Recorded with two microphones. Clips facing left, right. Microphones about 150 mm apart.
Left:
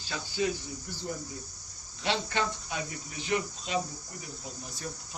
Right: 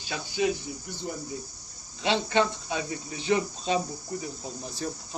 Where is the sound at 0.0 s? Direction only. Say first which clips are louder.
Right 3 dB; 15° right (ahead or behind).